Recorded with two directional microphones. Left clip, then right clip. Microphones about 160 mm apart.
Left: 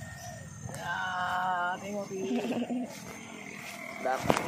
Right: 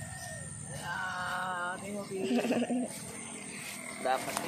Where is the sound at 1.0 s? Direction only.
35° left (ahead or behind).